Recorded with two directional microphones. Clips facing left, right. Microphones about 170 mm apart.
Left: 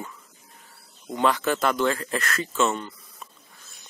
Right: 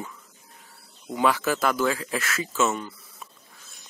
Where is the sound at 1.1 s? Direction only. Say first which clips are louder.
Even; 5° right (ahead or behind).